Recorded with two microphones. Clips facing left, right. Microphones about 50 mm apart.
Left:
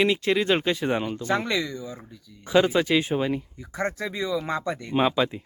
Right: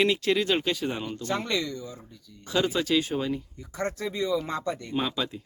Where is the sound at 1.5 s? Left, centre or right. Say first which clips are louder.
Left 2 dB; centre.